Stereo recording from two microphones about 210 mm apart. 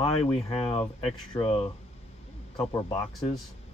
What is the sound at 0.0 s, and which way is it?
Speech, 25° left (ahead or behind).